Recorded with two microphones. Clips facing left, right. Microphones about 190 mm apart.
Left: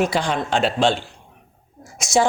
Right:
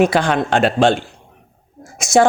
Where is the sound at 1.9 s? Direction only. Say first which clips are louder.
Right 5 dB; 55° right (ahead or behind).